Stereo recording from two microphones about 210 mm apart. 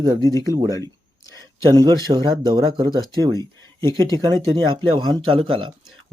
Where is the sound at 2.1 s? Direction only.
25° right (ahead or behind).